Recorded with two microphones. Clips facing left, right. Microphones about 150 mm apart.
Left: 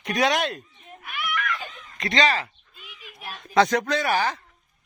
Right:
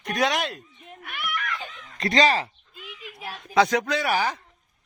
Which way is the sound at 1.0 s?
55° right (ahead or behind).